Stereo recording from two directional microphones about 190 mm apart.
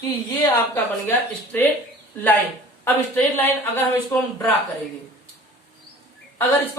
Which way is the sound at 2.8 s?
10° left (ahead or behind).